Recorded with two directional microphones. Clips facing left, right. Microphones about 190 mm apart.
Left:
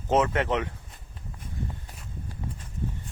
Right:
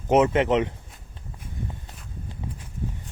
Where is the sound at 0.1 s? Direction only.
20° right (ahead or behind).